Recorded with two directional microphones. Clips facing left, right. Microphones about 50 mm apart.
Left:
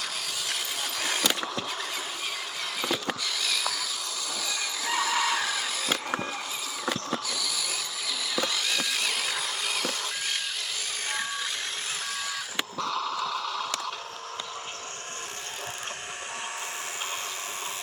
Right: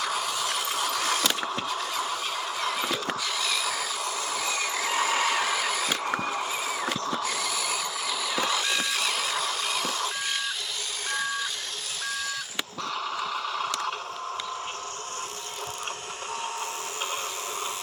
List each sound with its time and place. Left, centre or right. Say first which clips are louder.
0.4 s train: right 5 dB; centre
3.4 s mechanisms: left 1 dB; centre
4.5 s a sound: right 1 dB; right
8.4 s vehicle: right 2 dB; centre
8.9 s music: right 2 dB; centre
12.8 s a sound: left 1 dB; centre